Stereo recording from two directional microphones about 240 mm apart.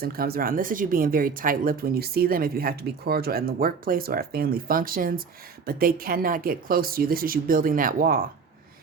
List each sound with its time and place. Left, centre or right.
0.0 s speech: right